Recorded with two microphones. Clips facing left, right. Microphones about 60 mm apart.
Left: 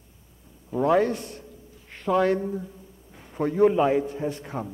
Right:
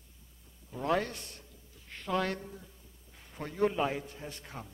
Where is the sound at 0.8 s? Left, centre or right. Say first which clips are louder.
Left 9 dB; centre.